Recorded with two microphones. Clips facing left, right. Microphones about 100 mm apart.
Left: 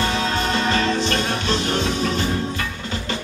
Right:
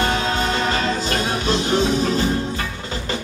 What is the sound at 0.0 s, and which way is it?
Music, 40° right (ahead or behind).